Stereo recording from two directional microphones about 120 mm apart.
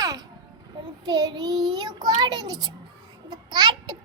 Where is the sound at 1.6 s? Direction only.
35° right (ahead or behind).